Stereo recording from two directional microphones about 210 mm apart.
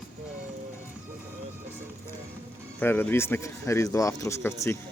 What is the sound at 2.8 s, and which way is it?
Speech, 10° left (ahead or behind).